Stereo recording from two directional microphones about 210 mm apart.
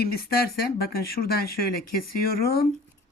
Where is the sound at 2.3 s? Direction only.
45° left (ahead or behind).